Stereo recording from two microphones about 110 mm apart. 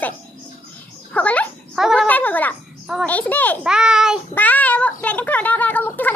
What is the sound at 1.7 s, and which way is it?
Speech, 5° right (ahead or behind).